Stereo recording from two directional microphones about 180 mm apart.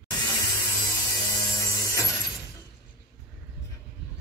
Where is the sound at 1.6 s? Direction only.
15° left (ahead or behind).